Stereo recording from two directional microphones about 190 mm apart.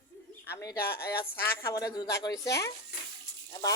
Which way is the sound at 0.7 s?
55° left (ahead or behind).